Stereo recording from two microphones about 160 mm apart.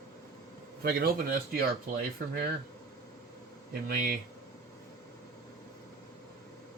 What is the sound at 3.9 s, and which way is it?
Speech, 65° right (ahead or behind).